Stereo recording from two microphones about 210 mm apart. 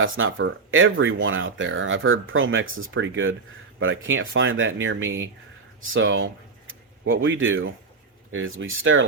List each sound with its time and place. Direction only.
0.0 s speech: 70° right (ahead or behind)